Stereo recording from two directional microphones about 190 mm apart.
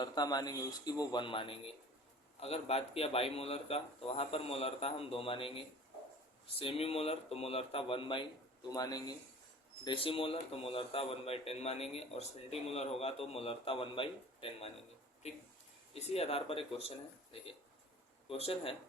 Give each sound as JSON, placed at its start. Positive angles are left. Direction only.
{"t": 0.0, "sound": "a man's voice", "side_deg": 20}
{"t": 18.3, "sound": "a man's voice", "side_deg": 30}